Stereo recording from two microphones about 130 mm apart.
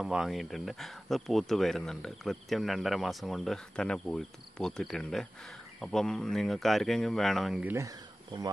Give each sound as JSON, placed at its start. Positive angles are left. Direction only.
{"t": 0.0, "sound": "speech", "side_deg": -5}
{"t": 7.6, "sound": "speech", "side_deg": -20}